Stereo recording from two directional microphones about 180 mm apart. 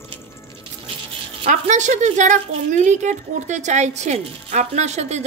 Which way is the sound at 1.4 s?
45° right (ahead or behind).